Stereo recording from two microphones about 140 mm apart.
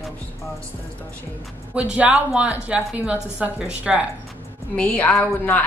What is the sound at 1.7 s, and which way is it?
A woman's voice, 10° right (ahead or behind).